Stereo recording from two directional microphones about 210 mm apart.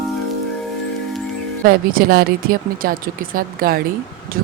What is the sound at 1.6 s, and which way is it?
Speech, 45° right (ahead or behind).